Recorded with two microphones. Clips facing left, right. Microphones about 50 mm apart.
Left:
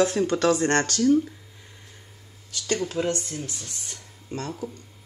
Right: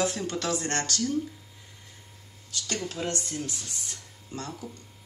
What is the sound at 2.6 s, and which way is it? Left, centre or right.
Speech, left.